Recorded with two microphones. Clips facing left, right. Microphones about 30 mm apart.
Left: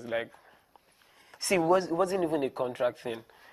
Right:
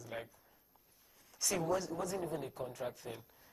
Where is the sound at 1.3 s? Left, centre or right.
Left.